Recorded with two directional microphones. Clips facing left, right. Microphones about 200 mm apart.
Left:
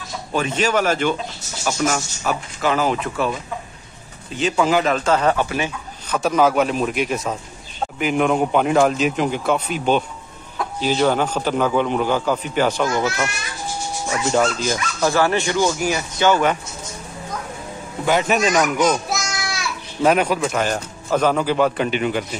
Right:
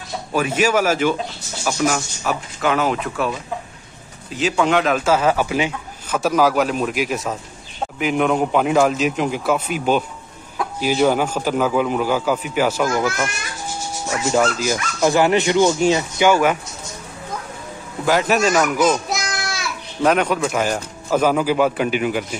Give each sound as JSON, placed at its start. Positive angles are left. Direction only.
{"t": 0.3, "sound": "a man's voice", "side_deg": -5}
{"t": 14.3, "sound": "a man's voice", "side_deg": -5}
{"t": 15.0, "sound": "speech", "side_deg": -20}
{"t": 16.2, "sound": "a man's voice", "side_deg": -10}
{"t": 18.0, "sound": "a man's voice", "side_deg": 0}
{"t": 18.8, "sound": "a sound", "side_deg": 5}
{"t": 20.4, "sound": "a man's voice", "side_deg": -5}